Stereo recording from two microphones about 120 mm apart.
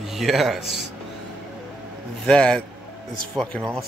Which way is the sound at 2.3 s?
5° left (ahead or behind).